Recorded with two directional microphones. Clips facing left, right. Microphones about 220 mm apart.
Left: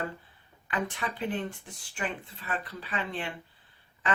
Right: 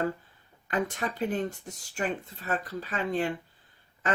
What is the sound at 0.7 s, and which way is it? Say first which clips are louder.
Speech: right 3 dB; 40° right (ahead or behind).